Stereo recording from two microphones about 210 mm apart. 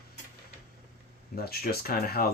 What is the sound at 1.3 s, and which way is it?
Speech, 45° left (ahead or behind).